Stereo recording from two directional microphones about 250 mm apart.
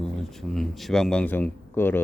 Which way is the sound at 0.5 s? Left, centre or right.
Centre.